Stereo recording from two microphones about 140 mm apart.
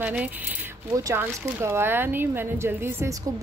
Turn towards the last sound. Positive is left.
turn(degrees=-15)  # may be behind; listen again after turning